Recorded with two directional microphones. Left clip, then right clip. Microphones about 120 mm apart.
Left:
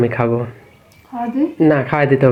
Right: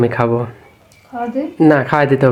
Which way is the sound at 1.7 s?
25° right (ahead or behind).